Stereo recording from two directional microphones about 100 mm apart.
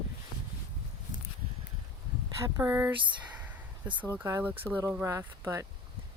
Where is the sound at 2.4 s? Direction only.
25° right (ahead or behind).